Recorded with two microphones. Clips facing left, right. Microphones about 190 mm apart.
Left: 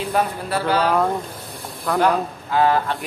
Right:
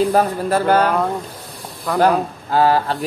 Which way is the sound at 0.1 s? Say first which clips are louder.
Right 5 dB; 40° right (ahead or behind).